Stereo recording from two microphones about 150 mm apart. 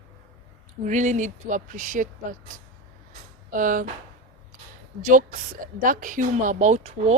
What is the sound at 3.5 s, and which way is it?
Speech, 65° right (ahead or behind).